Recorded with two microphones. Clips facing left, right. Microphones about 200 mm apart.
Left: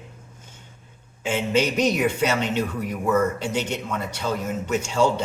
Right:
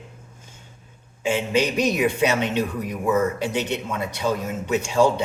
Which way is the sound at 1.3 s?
10° right (ahead or behind).